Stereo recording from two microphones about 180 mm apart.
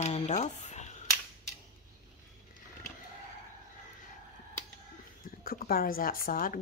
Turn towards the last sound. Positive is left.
turn(degrees=50)  # may be behind; listen again after turning